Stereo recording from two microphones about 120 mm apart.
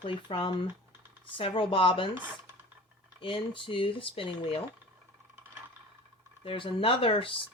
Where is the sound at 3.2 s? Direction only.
45° left (ahead or behind).